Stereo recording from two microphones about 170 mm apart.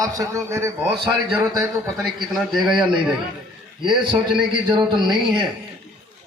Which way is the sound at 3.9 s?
25° right (ahead or behind).